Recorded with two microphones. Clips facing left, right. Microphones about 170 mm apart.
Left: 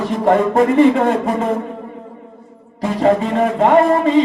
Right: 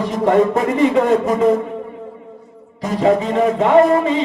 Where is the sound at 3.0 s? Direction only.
45° left (ahead or behind).